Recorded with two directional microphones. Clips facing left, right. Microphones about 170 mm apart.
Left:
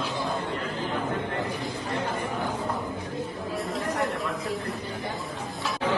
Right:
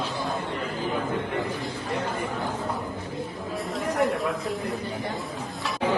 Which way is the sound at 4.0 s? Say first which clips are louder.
Right 4 dB; centre (ahead or behind).